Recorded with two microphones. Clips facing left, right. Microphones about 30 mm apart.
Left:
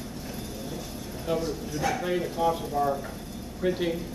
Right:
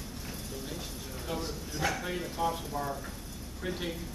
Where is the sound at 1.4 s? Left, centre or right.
Centre.